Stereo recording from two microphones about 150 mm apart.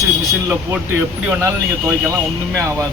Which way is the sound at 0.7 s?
15° right (ahead or behind).